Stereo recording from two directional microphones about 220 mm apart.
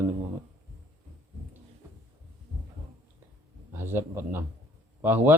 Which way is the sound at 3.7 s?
10° right (ahead or behind).